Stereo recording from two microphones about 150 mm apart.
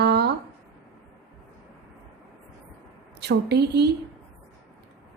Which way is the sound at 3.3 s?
90° right.